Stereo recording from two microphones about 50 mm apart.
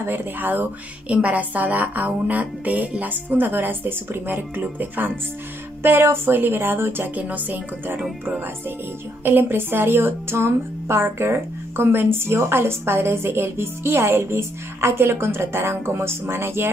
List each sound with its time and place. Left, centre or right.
0.0 s a woman's voice: right
1.0 s speech: right
5.8 s a woman's voice: right
7.2 s speech: right
9.2 s speech: right